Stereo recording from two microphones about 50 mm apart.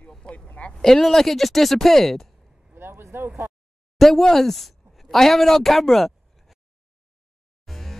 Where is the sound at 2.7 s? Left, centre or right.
Right.